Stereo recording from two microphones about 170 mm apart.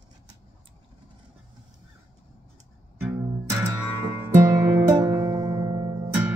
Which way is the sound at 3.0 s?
15° right (ahead or behind).